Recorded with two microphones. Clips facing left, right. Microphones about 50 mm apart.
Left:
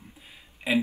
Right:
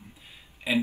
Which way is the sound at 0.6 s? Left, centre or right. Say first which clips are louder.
Left 1 dB; left.